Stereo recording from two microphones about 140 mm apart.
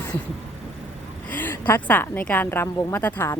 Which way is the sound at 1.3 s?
15° left (ahead or behind).